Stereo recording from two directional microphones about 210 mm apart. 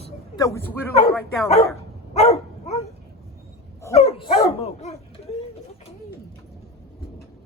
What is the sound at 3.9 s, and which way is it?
Dog, 30° left (ahead or behind).